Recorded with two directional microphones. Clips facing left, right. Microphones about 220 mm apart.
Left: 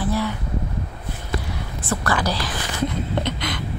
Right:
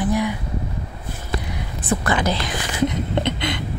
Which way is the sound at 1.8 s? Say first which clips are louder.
Right 2 dB; 20° right (ahead or behind).